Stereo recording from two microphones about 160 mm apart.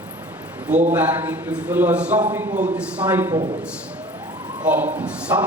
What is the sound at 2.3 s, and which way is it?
Speech, 20° right (ahead or behind).